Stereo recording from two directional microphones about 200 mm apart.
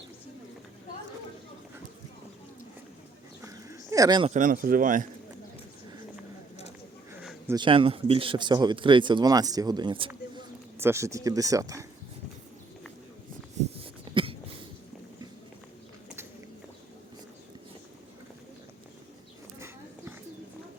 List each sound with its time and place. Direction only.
3.4 s bird: 15° right (ahead or behind)
4.3 s speech: 40° right (ahead or behind)
7.2 s a sound: 5° right (ahead or behind)
7.5 s speech: 25° right (ahead or behind)
10.8 s speech: 15° right (ahead or behind)
14.1 s a sound: 25° right (ahead or behind)
19.5 s horse: 10° right (ahead or behind)